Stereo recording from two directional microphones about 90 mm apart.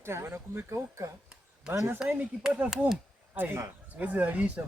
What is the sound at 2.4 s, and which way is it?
Speech, 10° right (ahead or behind).